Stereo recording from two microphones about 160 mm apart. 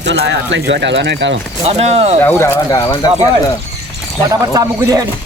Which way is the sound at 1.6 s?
40° right (ahead or behind).